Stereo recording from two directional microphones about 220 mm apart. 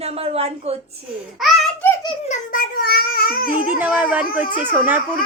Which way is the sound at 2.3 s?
40° left (ahead or behind).